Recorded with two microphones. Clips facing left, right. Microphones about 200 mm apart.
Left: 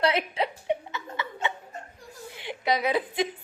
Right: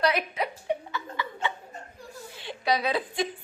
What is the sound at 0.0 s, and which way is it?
Chuckle, 25° left (ahead or behind).